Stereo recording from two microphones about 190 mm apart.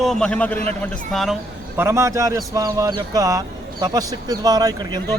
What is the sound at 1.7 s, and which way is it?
Speech, 15° right (ahead or behind).